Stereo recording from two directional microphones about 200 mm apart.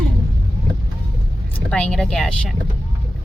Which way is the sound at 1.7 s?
5° left (ahead or behind).